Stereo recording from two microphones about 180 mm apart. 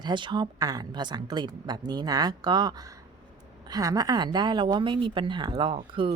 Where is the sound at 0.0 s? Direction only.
25° right (ahead or behind).